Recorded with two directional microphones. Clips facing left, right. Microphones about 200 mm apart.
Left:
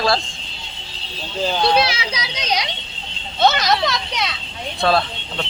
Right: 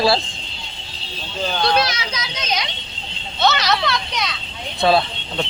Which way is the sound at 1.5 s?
10° left (ahead or behind).